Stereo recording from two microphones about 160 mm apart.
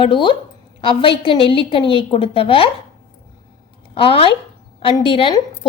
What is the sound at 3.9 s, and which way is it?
A woman's voice, 35° left (ahead or behind).